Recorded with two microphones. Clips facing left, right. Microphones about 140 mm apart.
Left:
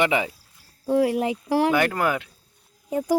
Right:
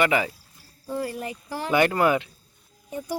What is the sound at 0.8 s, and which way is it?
Speech, 80° left.